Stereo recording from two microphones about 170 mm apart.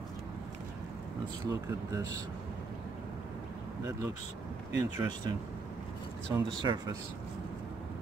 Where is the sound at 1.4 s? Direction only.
20° right (ahead or behind).